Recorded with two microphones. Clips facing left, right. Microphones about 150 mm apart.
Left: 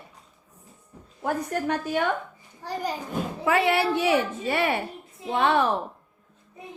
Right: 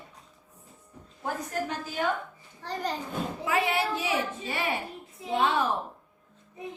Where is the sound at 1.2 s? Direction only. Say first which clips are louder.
Left 5 dB; 65° left (ahead or behind).